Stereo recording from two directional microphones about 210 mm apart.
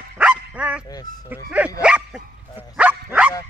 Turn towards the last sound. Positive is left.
turn(degrees=-5)  # may be behind; listen again after turning